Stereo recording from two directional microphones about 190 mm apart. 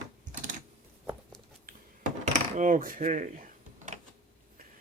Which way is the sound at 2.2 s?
40° right (ahead or behind).